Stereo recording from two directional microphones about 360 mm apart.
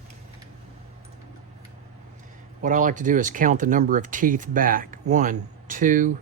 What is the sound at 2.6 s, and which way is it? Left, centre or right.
Speech, right.